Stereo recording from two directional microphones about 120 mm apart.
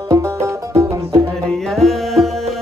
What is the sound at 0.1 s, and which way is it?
Music, 25° right (ahead or behind).